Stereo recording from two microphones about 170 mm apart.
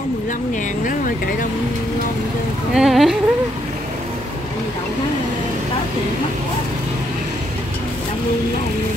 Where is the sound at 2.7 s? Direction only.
Centre (ahead or behind).